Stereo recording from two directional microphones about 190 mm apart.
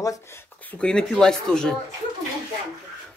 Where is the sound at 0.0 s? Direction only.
15° left (ahead or behind).